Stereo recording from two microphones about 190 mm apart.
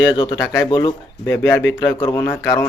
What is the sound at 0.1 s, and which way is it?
Speech, 25° left (ahead or behind).